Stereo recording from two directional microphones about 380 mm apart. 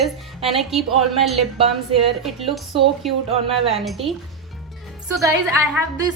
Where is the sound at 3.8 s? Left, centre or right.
Centre.